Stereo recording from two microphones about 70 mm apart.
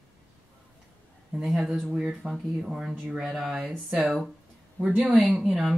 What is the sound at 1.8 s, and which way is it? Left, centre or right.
Speech, centre.